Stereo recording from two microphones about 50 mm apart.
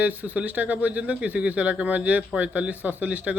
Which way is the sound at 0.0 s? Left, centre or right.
Right.